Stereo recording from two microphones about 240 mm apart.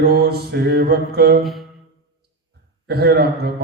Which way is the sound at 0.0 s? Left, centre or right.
Right.